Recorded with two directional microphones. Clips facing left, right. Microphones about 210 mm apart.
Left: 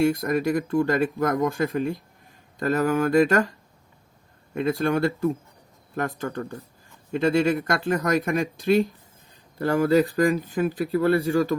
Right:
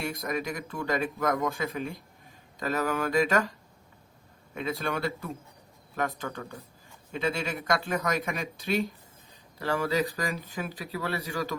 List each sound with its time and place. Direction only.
0.0 s speech: 50° left (ahead or behind)
4.5 s speech: 50° left (ahead or behind)